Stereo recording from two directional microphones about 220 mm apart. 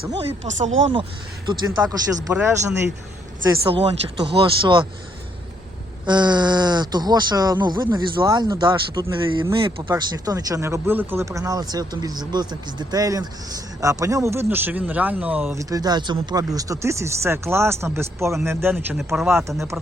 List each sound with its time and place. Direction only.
0.2 s speech: 30° right (ahead or behind)
1.5 s speech: 20° right (ahead or behind)
3.6 s speech: 25° right (ahead or behind)
6.1 s speech: 20° right (ahead or behind)